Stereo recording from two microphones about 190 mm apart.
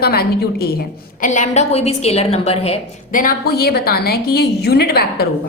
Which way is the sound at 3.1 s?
50° left (ahead or behind).